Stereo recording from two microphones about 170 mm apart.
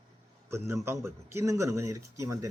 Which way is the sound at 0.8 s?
15° right (ahead or behind).